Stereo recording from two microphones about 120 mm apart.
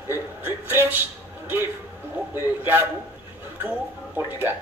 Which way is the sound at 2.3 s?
15° right (ahead or behind).